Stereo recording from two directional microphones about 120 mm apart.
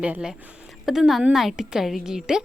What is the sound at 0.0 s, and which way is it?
A woman's voice, 10° right (ahead or behind).